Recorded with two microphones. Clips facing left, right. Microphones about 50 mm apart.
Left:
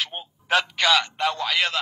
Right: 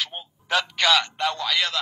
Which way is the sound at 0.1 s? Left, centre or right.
Left.